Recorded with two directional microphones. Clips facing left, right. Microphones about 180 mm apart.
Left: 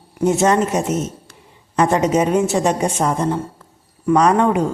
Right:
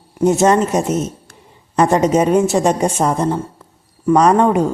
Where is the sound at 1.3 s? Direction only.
40° right (ahead or behind).